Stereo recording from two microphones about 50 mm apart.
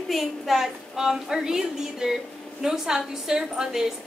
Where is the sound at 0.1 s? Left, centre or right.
Centre.